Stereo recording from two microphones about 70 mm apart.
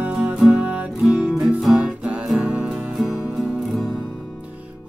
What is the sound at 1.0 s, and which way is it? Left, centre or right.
Music, centre.